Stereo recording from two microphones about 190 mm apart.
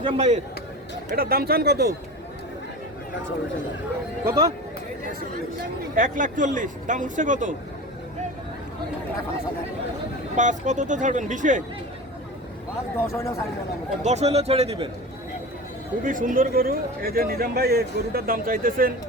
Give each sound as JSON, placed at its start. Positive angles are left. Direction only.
{"t": 0.0, "sound": "speech", "side_deg": -30}
{"t": 1.1, "sound": "speech", "side_deg": -50}
{"t": 4.3, "sound": "speech", "side_deg": -20}
{"t": 6.0, "sound": "speech", "side_deg": -45}
{"t": 10.3, "sound": "speech", "side_deg": -40}
{"t": 13.0, "sound": "speech", "side_deg": 15}
{"t": 14.0, "sound": "speech", "side_deg": -35}
{"t": 16.0, "sound": "speech", "side_deg": -45}